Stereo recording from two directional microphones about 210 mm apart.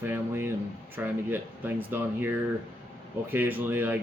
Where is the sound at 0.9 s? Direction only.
10° right (ahead or behind).